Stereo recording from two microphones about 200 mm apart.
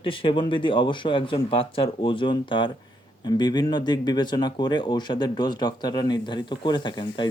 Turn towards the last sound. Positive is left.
turn(degrees=25)  # may be behind; listen again after turning